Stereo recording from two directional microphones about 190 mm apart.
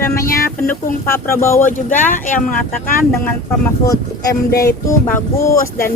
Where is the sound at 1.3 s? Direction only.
15° left (ahead or behind).